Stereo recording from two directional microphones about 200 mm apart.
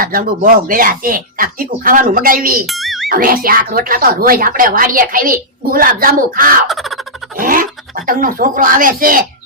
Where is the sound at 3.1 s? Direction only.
45° right (ahead or behind).